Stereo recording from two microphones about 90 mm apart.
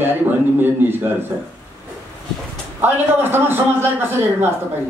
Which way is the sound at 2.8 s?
25° right (ahead or behind).